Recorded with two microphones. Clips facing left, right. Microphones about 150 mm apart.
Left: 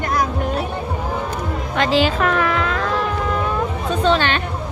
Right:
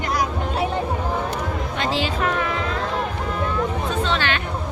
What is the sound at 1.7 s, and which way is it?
Music, 85° left.